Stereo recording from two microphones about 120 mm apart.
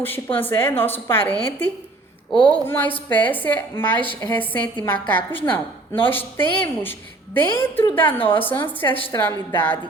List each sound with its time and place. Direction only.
0.3 s a woman's voice: 15° left (ahead or behind)
8.8 s a woman's voice: 30° left (ahead or behind)
9.1 s a woman's voice: 20° left (ahead or behind)